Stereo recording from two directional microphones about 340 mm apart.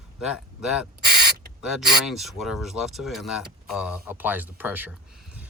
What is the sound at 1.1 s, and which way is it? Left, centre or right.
Spray, right.